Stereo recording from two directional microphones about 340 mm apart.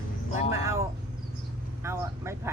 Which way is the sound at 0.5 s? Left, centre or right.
Centre.